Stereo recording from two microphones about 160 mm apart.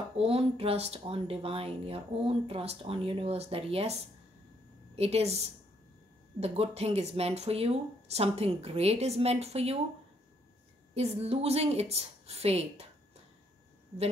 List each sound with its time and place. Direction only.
0.2 s speech: 35° right (ahead or behind)
11.0 s speech: 40° right (ahead or behind)